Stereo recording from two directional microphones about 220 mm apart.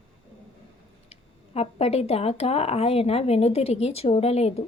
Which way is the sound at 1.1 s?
25° left (ahead or behind).